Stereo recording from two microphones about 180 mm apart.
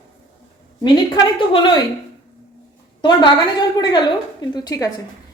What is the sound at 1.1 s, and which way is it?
Speech, 20° left (ahead or behind).